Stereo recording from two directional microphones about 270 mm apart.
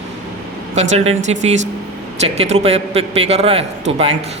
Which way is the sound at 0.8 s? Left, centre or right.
Right.